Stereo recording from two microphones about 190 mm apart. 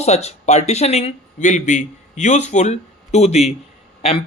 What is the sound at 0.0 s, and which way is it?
Speech, 35° left (ahead or behind).